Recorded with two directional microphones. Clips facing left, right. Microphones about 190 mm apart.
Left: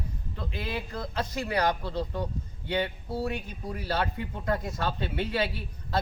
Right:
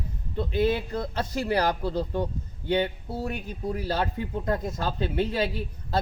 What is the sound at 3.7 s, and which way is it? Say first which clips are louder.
Speech: right 1 dB; 40° right (ahead or behind).